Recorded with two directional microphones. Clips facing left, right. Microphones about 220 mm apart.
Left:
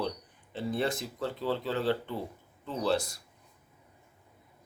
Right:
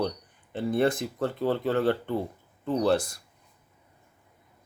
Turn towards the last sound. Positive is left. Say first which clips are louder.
# right 6 dB
turn(degrees=-50)  # may be behind; listen again after turning